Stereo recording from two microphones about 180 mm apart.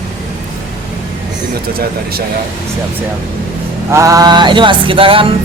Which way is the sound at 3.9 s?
20° right (ahead or behind).